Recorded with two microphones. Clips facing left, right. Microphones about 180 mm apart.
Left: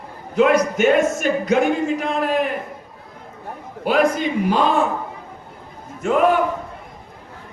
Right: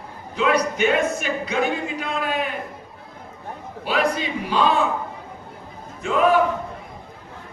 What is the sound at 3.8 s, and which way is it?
Speech, 50° left (ahead or behind).